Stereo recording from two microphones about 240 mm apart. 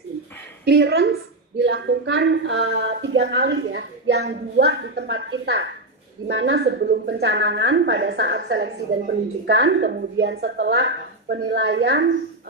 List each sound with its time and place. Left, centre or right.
0.7 s a woman's voice: right